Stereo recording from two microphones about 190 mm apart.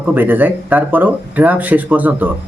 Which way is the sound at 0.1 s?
10° right (ahead or behind).